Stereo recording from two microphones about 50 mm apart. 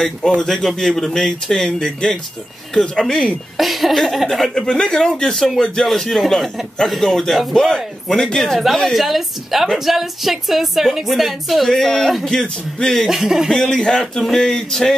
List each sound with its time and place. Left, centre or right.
0.4 s speech: centre
3.5 s a woman's voice: centre
4.6 s a woman's voice: centre
8.4 s a woman's voice: centre
13.1 s speech: centre
13.5 s speech: centre